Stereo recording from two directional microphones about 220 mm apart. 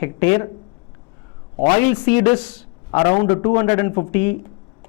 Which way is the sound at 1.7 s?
15° left (ahead or behind).